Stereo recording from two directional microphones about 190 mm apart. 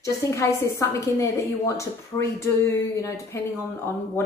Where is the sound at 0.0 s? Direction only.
15° left (ahead or behind).